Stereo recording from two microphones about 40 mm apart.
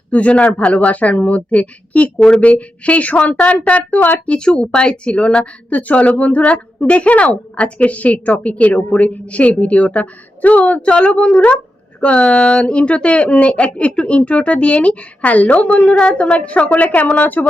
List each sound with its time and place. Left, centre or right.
0.1 s a woman's voice: left
4.3 s a woman's voice: left
16.0 s a woman's voice: left